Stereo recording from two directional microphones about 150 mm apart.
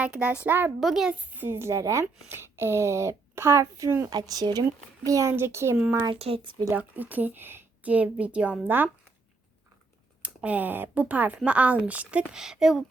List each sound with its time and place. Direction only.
0.0 s speech: 10° right (ahead or behind)
0.8 s speech: centre (ahead or behind); by 6.1 s 25° right (ahead or behind)
6.1 s speech: 40° right (ahead or behind)
6.7 s speech: 10° right (ahead or behind)
10.2 s speech: 10° right (ahead or behind)